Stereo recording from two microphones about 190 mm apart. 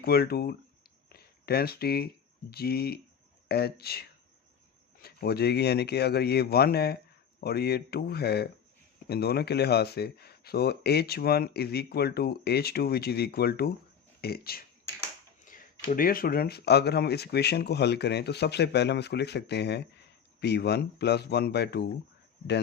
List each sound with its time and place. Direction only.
0.0 s speech: 55° left (ahead or behind)
5.0 s speech: 55° left (ahead or behind)